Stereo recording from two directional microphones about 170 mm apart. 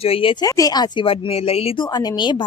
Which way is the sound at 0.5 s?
20° left (ahead or behind).